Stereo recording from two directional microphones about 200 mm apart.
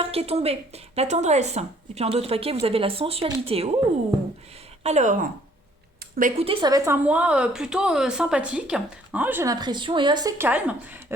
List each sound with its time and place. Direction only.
0.1 s a woman's voice: 30° right (ahead or behind)
4.8 s a woman's voice: 35° right (ahead or behind)
6.4 s a woman's voice: 25° right (ahead or behind); by 11.0 s 10° right (ahead or behind)